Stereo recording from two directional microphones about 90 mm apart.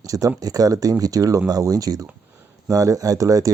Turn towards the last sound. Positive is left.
turn(degrees=-40)  # may be behind; listen again after turning